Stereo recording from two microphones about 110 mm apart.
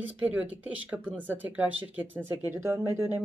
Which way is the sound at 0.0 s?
15° right (ahead or behind).